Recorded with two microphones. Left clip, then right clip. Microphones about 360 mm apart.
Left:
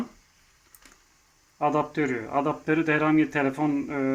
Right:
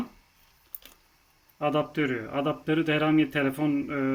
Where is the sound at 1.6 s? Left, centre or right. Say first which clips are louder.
Left 2 dB; centre.